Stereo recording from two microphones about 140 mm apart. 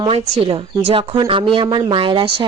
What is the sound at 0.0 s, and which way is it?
Speech, 45° right (ahead or behind).